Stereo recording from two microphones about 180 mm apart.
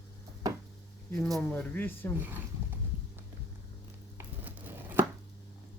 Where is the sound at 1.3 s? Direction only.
10° left (ahead or behind).